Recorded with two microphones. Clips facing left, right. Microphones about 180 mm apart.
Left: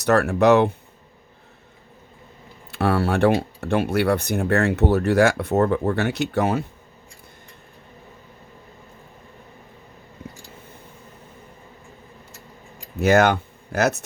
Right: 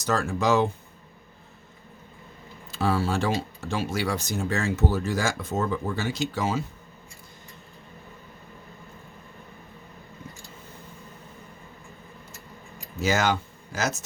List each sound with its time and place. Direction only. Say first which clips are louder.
0.0 s speech: left 8 dB; 65° left (ahead or behind)
2.7 s speech: left 4 dB; 65° left (ahead or behind)
13.0 s speech: left 7 dB; 60° left (ahead or behind)